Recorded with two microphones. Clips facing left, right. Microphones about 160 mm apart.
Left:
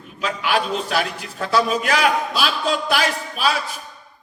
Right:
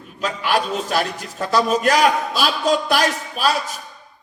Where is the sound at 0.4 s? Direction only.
40° right (ahead or behind).